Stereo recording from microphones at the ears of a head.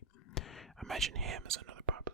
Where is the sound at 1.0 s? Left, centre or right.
Right.